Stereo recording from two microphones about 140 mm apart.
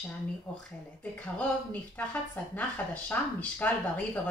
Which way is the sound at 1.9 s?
10° left (ahead or behind).